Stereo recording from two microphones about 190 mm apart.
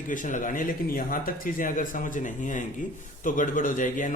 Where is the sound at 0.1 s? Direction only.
45° left (ahead or behind).